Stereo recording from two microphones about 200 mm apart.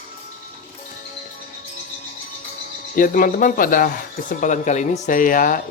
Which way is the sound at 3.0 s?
45° left (ahead or behind).